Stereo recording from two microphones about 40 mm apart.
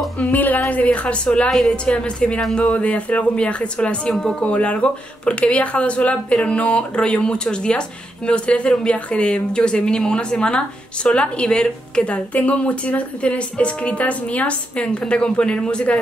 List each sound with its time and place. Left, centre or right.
0.2 s a woman's voice: left
1.0 s speech: left
1.5 s a woman's voice: centre
1.9 s speech: left